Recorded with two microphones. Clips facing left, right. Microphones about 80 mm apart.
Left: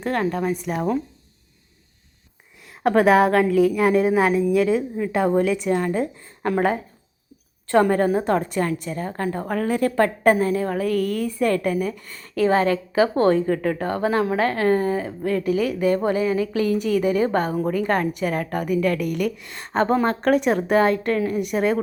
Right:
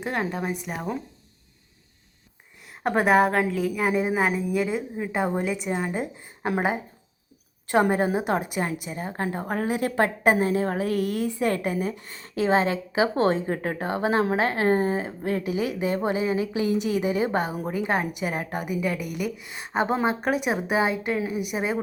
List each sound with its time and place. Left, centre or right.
0.0 s a woman's voice: centre
2.8 s a woman's voice: centre; by 13.8 s right
13.8 s a woman's voice: right